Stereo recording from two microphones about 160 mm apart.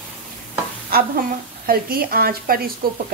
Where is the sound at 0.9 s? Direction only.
70° right (ahead or behind).